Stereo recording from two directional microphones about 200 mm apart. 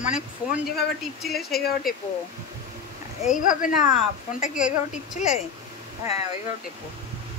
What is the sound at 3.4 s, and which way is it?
Speech, 40° left (ahead or behind).